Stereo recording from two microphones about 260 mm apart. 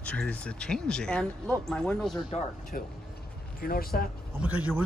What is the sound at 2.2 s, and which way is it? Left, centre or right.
Speech, left.